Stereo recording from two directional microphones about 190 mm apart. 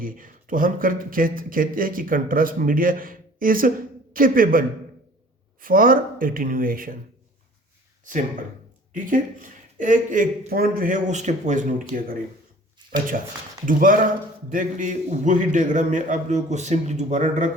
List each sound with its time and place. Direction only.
0.0 s speech: 45° right (ahead or behind)
5.6 s speech: 50° right (ahead or behind)
8.9 s a man's voice: 45° right (ahead or behind)